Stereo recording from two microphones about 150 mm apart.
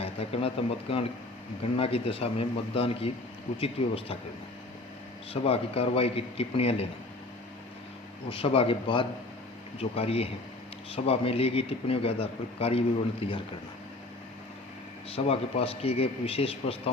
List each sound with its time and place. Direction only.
0.0 s a man's voice: 40° left (ahead or behind)
5.3 s a man's voice: 40° left (ahead or behind)
8.3 s a man's voice: 40° left (ahead or behind)
15.1 s a man's voice: 40° left (ahead or behind)